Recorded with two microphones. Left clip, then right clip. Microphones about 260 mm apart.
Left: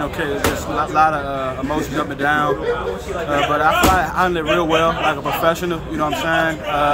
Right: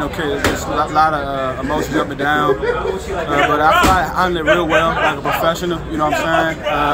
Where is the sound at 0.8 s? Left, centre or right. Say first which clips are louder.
Right 1 dB; centre.